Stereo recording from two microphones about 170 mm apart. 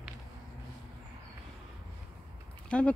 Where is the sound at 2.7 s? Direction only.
5° left (ahead or behind).